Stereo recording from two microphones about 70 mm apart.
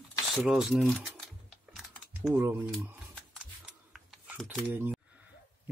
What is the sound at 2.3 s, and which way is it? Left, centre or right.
Speech, right.